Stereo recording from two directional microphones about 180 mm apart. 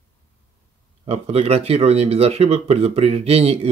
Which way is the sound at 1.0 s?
35° right (ahead or behind).